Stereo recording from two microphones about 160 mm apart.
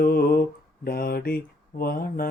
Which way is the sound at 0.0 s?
70° left (ahead or behind).